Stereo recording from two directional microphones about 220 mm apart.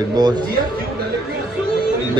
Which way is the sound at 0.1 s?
20° right (ahead or behind).